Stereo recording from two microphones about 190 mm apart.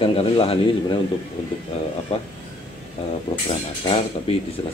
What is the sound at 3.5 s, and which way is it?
Speech, 30° left (ahead or behind).